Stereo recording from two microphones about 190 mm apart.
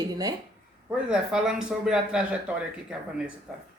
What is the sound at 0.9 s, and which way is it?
Speech, 5° right (ahead or behind).